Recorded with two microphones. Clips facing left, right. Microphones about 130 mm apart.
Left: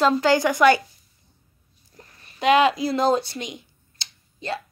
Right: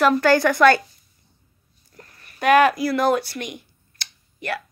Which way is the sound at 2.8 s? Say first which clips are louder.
Right 1 dB; 25° left (ahead or behind).